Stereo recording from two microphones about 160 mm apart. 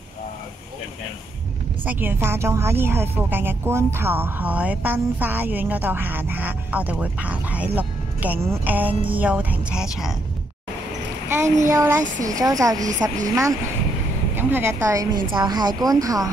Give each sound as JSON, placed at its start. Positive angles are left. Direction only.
{"t": 1.9, "sound": "speech", "side_deg": -10}
{"t": 11.2, "sound": "speech", "side_deg": -20}